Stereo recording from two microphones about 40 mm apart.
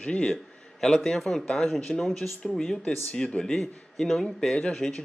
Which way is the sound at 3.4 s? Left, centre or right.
Centre.